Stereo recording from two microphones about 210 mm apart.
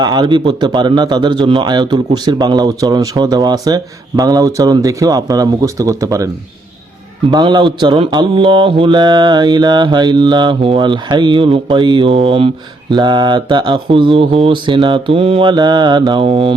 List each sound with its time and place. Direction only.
0.0 s mantra: 20° right (ahead or behind)
4.2 s speech: 20° right (ahead or behind)
7.3 s mantra: 20° right (ahead or behind)